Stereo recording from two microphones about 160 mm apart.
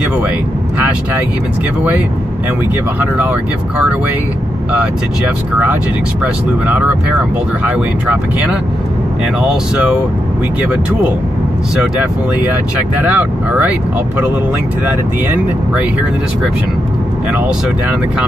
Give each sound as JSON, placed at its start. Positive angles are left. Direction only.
{"t": 3.0, "sound": "speech", "side_deg": -10}
{"t": 4.7, "sound": "speech", "side_deg": -10}
{"t": 7.6, "sound": "speech", "side_deg": -10}
{"t": 13.0, "sound": "speech", "side_deg": -10}